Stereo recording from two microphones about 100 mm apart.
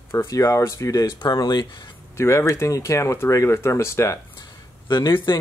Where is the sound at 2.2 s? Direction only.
30° left (ahead or behind).